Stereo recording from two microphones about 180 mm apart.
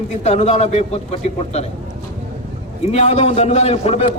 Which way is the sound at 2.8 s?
35° left (ahead or behind).